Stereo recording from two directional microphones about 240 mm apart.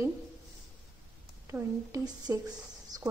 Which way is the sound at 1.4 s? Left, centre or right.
Centre.